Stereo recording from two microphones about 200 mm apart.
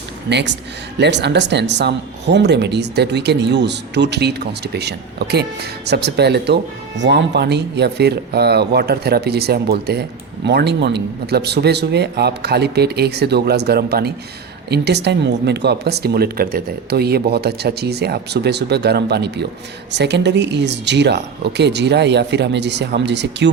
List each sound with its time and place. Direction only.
0.3 s speech: 60° right (ahead or behind)